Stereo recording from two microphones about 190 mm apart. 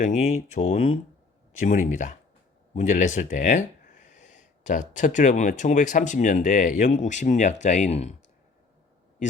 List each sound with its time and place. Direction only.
0.0 s speech: 40° left (ahead or behind)